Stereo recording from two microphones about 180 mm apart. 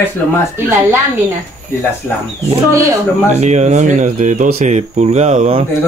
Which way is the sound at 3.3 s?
40° right (ahead or behind).